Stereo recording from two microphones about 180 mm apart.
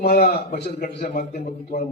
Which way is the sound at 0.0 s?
65° left (ahead or behind).